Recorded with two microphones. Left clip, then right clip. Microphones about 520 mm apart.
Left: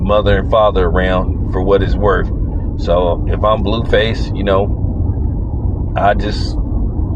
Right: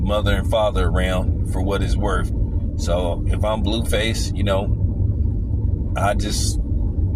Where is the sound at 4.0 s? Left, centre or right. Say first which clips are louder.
Left 8 dB; right.